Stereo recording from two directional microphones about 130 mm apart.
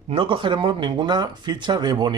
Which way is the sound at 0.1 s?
45° right (ahead or behind).